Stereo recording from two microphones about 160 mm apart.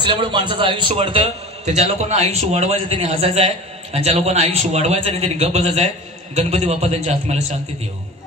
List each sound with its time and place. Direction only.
0.0 s a man's voice: 35° right (ahead or behind)